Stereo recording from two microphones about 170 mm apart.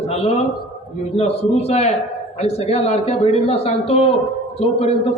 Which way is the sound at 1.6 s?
40° left (ahead or behind).